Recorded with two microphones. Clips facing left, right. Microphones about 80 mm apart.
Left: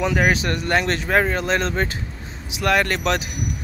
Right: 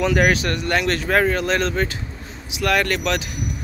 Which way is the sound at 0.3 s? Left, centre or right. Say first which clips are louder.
Even; left.